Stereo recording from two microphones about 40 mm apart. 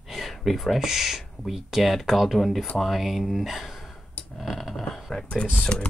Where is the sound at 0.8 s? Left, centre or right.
Centre.